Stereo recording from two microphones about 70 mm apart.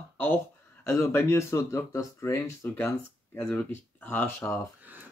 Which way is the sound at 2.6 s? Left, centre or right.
Left.